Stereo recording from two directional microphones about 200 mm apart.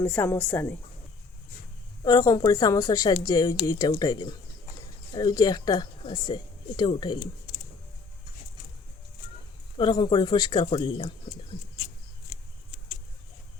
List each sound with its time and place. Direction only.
0.0 s speech: 10° left (ahead or behind)
2.0 s speech: 15° left (ahead or behind)
9.7 s speech: 25° left (ahead or behind)